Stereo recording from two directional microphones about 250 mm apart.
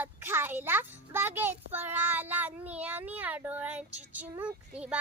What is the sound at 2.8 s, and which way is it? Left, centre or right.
Speech, centre.